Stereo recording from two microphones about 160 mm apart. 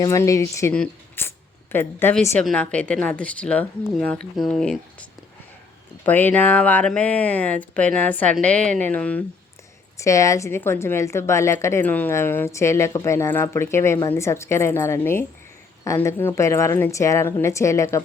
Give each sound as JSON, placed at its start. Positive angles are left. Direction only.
{"t": 0.0, "sound": "a woman's voice", "side_deg": 20}
{"t": 6.1, "sound": "a woman's voice", "side_deg": 10}